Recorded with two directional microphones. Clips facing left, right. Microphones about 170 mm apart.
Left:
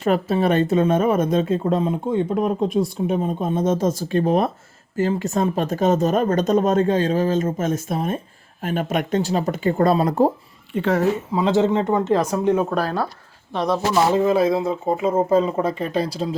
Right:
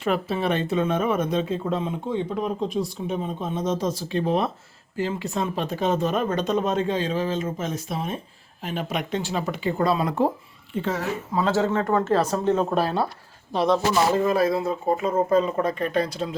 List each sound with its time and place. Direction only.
0.0 s speech: 40° left (ahead or behind)
10.8 s a woman's voice: 65° left (ahead or behind)
11.3 s speech: 20° left (ahead or behind)
12.8 s speech: 25° right (ahead or behind)
14.3 s speech: 20° left (ahead or behind)